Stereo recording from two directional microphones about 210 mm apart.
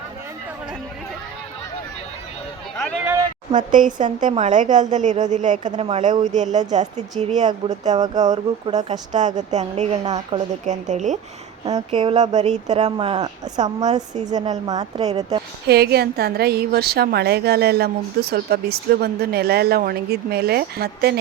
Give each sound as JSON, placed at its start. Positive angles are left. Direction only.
{"t": 3.7, "sound": "a woman's voice", "side_deg": -40}
{"t": 8.2, "sound": "a woman's voice", "side_deg": -35}
{"t": 11.6, "sound": "speech", "side_deg": -25}
{"t": 15.6, "sound": "a woman's voice", "side_deg": -50}